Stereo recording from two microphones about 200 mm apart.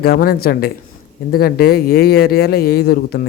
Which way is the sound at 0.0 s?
50° left (ahead or behind).